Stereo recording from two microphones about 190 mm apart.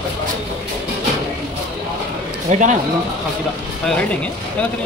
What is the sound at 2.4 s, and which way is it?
Speech, 40° right (ahead or behind).